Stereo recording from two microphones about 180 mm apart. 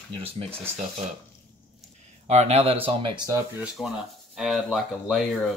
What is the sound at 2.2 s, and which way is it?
Speech, 35° right (ahead or behind).